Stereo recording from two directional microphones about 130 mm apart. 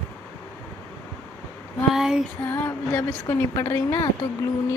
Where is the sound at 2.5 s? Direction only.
20° left (ahead or behind).